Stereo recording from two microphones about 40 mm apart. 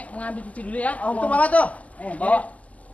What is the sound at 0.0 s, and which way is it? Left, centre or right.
Speech, left.